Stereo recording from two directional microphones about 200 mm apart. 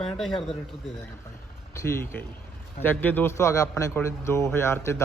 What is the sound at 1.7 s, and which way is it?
A man's voice, 15° left (ahead or behind).